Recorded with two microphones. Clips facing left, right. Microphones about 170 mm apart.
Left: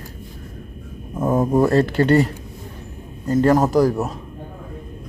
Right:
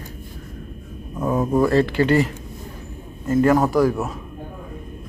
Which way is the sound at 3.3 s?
35° left (ahead or behind).